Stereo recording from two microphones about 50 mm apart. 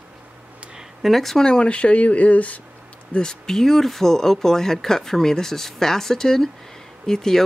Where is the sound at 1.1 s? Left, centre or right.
Centre.